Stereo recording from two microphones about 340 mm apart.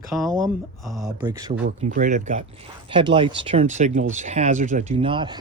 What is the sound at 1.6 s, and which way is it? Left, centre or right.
Speech, right.